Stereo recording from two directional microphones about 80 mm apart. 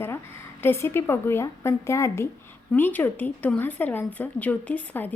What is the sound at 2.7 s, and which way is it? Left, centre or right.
Speech, left.